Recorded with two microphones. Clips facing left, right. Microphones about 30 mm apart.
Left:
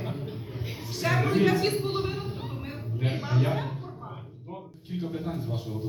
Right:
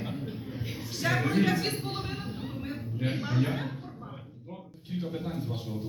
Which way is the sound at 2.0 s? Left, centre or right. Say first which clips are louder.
Left 6 dB; left.